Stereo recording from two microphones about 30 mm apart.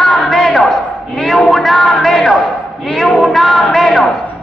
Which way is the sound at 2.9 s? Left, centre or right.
Centre.